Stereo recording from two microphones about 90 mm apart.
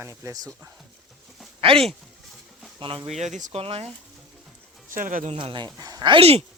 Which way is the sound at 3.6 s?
90° right.